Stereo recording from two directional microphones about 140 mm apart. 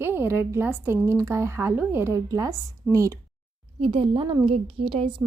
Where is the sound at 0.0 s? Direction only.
15° right (ahead or behind).